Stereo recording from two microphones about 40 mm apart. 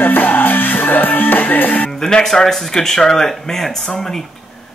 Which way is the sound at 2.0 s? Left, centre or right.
Centre.